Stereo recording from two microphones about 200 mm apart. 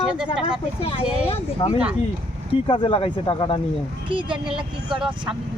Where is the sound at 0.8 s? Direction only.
30° left (ahead or behind).